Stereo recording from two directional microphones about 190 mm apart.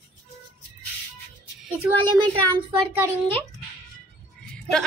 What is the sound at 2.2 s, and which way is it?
Speech, 25° right (ahead or behind).